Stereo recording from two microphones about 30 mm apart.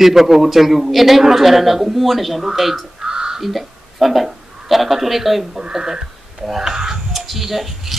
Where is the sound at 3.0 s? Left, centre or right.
Right.